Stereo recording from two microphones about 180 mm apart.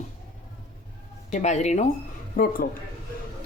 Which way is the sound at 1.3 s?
40° left (ahead or behind).